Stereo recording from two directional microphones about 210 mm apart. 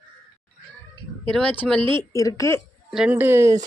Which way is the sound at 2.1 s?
15° left (ahead or behind).